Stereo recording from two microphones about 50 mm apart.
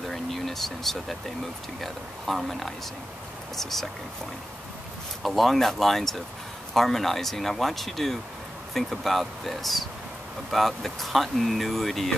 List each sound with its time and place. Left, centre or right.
0.1 s a sound: centre
1.8 s speech: centre
5.2 s speech: centre